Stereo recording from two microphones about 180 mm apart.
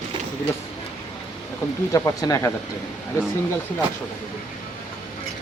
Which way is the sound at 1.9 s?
20° left (ahead or behind).